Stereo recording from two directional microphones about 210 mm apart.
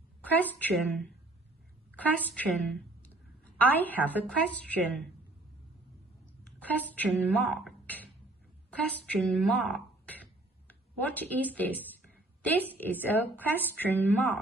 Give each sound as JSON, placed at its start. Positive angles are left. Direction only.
{"t": 0.2, "sound": "a woman's voice", "side_deg": 10}
{"t": 3.5, "sound": "a woman's voice", "side_deg": 10}
{"t": 6.6, "sound": "a woman's voice", "side_deg": 5}